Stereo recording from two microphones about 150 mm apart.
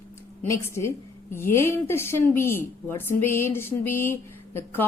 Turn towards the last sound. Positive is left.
turn(degrees=15)  # may be behind; listen again after turning